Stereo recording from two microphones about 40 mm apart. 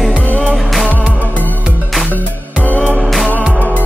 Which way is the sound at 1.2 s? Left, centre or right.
Left.